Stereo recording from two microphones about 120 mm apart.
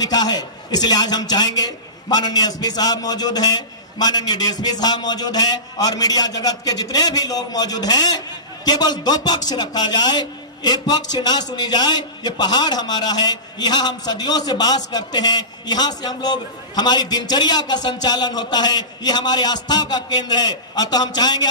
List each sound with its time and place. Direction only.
0.0 s a man's voice: 35° left (ahead or behind)